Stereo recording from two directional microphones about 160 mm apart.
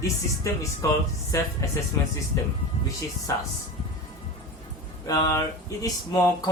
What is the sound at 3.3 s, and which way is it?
Speech, 20° left (ahead or behind).